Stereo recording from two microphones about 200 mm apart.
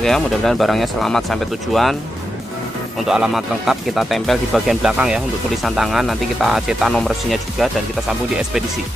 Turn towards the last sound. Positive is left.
turn(degrees=0)  # may be behind; listen again after turning